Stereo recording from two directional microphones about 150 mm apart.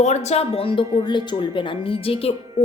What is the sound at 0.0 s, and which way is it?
Speech, 50° left (ahead or behind).